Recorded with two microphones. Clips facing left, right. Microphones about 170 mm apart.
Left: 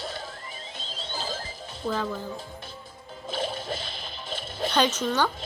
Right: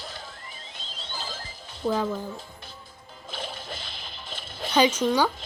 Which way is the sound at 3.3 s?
50° left (ahead or behind).